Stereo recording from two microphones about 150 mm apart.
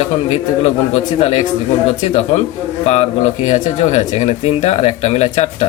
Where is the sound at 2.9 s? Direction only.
45° left (ahead or behind).